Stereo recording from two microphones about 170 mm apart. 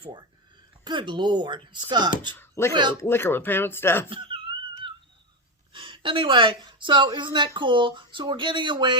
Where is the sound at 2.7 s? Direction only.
25° right (ahead or behind).